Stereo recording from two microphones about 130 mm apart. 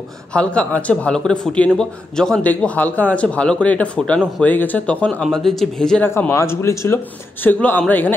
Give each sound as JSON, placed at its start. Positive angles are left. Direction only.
{"t": 0.3, "sound": "a man's voice", "side_deg": 10}
{"t": 6.0, "sound": "a man's voice", "side_deg": 20}